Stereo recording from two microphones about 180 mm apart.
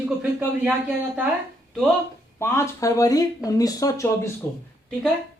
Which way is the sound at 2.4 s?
15° left (ahead or behind).